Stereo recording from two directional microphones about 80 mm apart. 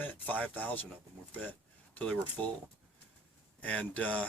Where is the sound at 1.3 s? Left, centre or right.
Left.